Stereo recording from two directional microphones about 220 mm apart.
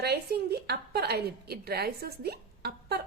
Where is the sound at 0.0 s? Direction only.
45° right (ahead or behind).